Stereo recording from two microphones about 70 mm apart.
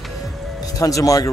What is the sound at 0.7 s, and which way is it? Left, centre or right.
Speech, left.